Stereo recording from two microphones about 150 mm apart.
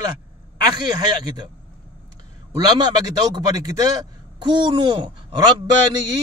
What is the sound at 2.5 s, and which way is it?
Speech, 30° right (ahead or behind).